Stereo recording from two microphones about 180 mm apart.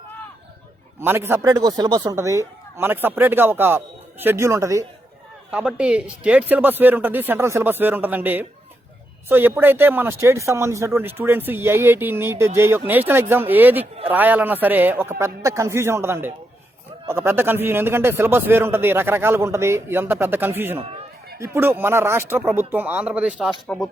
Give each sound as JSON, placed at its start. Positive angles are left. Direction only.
{"t": 0.9, "sound": "speech", "side_deg": -15}